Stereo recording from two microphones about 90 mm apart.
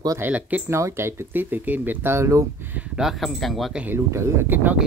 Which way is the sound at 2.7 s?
5° right (ahead or behind).